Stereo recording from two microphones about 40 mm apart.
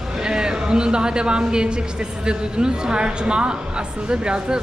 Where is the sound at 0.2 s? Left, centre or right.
Centre.